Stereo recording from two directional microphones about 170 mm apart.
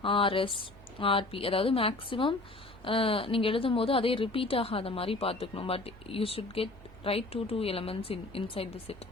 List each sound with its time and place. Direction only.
0.0 s a woman's voice: 30° left (ahead or behind)